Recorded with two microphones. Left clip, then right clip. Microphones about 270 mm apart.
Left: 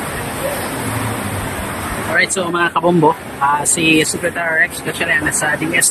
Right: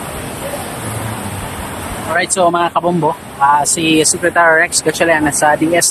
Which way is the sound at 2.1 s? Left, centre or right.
Centre.